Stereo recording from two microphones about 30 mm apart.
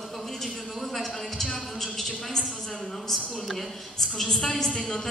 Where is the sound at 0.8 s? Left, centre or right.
Centre.